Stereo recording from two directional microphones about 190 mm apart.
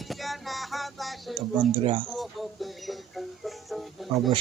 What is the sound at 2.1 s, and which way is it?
Music, centre (ahead or behind).